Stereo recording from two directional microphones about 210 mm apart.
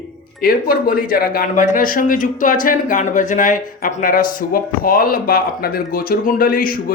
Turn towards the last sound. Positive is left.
turn(degrees=45)  # may be behind; listen again after turning